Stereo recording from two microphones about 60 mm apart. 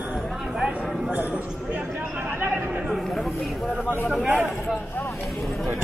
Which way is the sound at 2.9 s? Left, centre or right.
Centre.